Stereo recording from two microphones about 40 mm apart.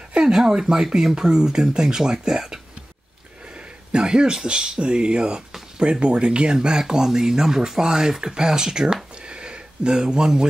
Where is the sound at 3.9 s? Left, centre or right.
Right.